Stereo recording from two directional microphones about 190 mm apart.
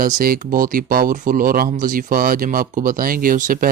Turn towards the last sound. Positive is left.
turn(degrees=-45)  # may be behind; listen again after turning